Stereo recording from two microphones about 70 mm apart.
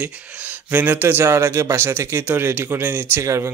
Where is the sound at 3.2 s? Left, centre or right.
Right.